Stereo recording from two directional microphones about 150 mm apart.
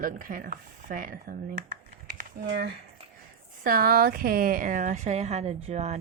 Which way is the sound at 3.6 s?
75° right (ahead or behind).